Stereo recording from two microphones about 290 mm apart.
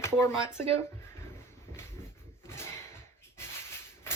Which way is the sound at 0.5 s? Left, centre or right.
Right.